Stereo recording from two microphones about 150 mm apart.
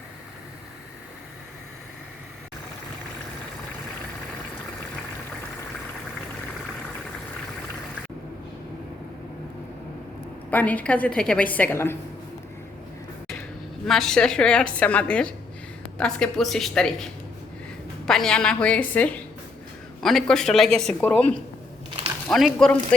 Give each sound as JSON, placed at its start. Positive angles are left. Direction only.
{"t": 10.5, "sound": "a woman's voice", "side_deg": 10}
{"t": 13.8, "sound": "a woman's voice", "side_deg": 5}